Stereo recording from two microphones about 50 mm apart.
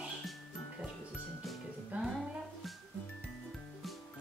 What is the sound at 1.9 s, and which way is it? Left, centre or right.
Music, right.